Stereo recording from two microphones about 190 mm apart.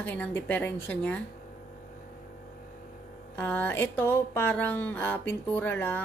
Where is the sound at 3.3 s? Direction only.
10° left (ahead or behind).